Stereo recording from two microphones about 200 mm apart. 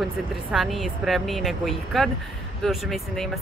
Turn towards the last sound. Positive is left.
turn(degrees=0)  # may be behind; listen again after turning